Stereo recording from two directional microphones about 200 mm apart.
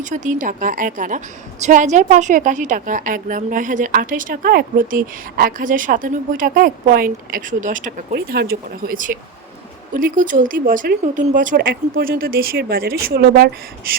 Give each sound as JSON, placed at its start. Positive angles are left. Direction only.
{"t": 0.0, "sound": "a woman's voice", "side_deg": -40}